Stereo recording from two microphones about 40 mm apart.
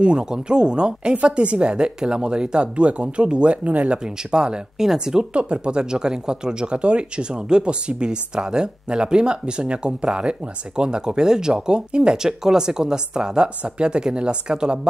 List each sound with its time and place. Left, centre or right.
0.0 s speech: right
3.6 s speech: right
4.3 s speech: right